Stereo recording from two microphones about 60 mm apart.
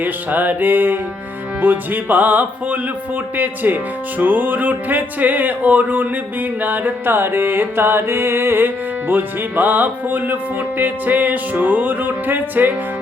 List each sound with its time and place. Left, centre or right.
0.0 s music: right